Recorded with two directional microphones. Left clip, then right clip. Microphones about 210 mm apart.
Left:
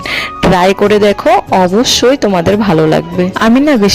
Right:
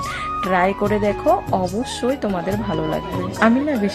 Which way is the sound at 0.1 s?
45° left (ahead or behind).